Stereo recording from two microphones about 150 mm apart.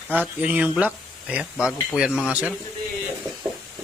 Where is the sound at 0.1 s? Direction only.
10° right (ahead or behind).